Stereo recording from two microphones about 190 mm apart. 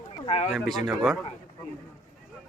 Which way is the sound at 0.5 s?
Centre (ahead or behind).